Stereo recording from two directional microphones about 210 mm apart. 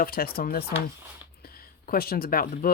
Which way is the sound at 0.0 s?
45° left (ahead or behind).